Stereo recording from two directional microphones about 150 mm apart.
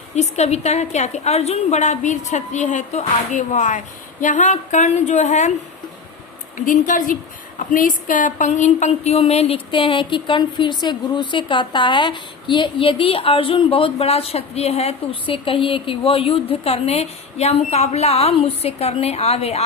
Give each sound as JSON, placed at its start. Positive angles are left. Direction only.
{"t": 0.2, "sound": "a woman's voice", "side_deg": 45}
{"t": 6.7, "sound": "a woman's voice", "side_deg": 60}